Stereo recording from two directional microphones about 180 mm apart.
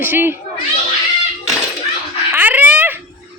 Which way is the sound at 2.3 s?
10° right (ahead or behind).